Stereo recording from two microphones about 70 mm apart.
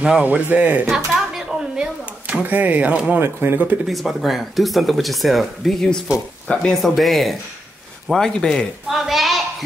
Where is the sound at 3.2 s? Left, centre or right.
Right.